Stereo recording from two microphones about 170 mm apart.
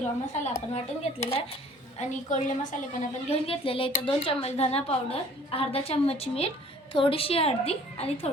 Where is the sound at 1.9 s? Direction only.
45° left (ahead or behind).